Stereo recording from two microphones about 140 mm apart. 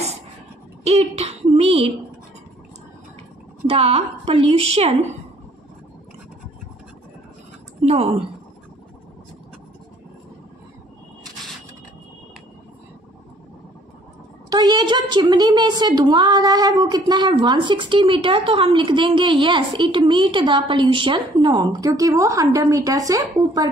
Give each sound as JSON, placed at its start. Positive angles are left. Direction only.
{"t": 0.8, "sound": "speech", "side_deg": -45}
{"t": 3.6, "sound": "a woman's voice", "side_deg": -45}
{"t": 7.8, "sound": "speech", "side_deg": -45}
{"t": 14.5, "sound": "a woman's voice", "side_deg": -30}